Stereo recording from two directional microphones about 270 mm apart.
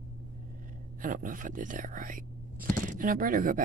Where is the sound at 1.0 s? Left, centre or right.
Right.